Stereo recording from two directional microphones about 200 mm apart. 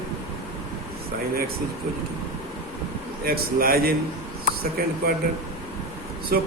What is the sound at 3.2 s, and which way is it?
Speech, 45° right (ahead or behind).